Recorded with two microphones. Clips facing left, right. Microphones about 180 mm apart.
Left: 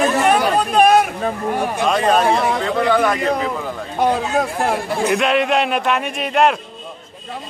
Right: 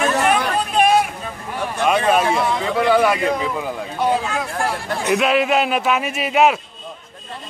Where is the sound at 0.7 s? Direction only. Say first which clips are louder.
Left 2 dB; 45° left (ahead or behind).